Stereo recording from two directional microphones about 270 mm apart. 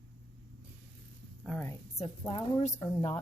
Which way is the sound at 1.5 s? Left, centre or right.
Centre.